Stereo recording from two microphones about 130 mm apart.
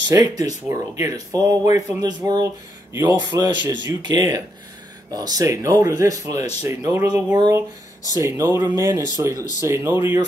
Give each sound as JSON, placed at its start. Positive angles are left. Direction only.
{"t": 0.0, "sound": "speech", "side_deg": -30}